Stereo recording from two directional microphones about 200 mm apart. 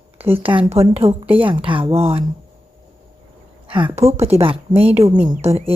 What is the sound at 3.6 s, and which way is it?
A woman's voice, 25° right (ahead or behind).